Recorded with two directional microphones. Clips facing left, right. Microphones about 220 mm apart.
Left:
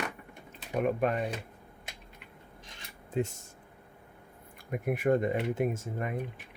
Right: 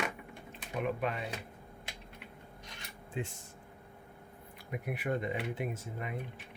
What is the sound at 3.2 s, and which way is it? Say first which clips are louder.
Speech: left 8 dB; 45° left (ahead or behind).